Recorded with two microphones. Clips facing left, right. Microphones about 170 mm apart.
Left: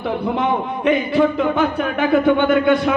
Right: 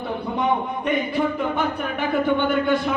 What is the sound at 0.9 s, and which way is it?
Speech, 90° left.